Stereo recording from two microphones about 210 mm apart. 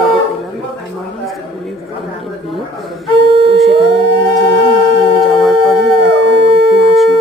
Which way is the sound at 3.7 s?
55° right (ahead or behind).